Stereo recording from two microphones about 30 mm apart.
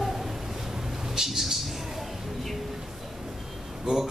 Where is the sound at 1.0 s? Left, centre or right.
Centre.